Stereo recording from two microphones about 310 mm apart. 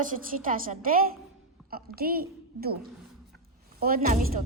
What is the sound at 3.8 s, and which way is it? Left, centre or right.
Speech, right.